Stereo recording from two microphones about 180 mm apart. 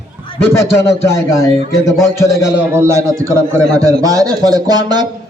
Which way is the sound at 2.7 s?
15° right (ahead or behind).